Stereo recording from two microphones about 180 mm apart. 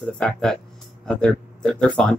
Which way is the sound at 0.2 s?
5° left (ahead or behind).